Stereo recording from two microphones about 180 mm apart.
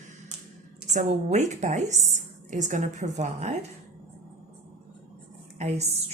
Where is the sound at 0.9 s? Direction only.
40° right (ahead or behind).